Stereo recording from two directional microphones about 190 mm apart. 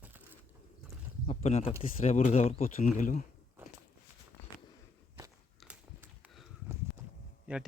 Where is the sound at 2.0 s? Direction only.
40° left (ahead or behind).